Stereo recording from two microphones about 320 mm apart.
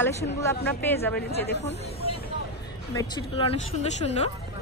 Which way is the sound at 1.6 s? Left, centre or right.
Left.